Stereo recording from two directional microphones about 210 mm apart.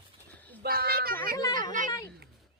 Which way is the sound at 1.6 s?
40° right (ahead or behind).